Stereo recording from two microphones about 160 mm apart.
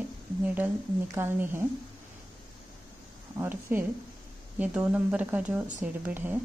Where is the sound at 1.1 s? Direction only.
15° right (ahead or behind).